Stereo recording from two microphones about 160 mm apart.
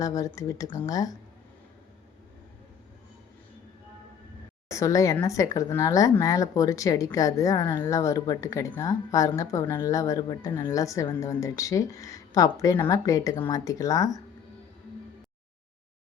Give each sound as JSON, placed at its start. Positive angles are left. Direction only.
{"t": 0.0, "sound": "speech", "side_deg": 20}
{"t": 4.7, "sound": "speech", "side_deg": 20}